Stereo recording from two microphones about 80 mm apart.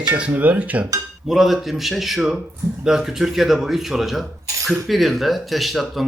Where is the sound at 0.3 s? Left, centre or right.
Right.